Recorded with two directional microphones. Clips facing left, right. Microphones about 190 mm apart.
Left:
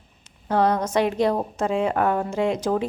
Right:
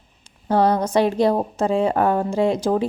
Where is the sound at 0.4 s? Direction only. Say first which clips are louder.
Right 3 dB; 30° right (ahead or behind).